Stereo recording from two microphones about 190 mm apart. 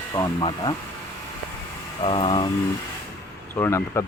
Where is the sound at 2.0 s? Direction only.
25° left (ahead or behind).